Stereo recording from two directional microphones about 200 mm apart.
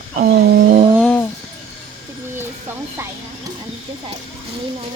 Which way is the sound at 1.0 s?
10° left (ahead or behind).